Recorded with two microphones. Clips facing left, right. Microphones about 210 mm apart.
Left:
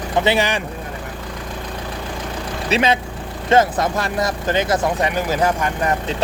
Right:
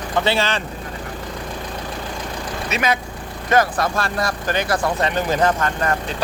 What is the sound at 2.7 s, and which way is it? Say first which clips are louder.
Speech: left 4 dB; 25° left (ahead or behind).